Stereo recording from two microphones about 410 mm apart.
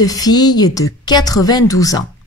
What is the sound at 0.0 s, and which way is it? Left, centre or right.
Speech, centre.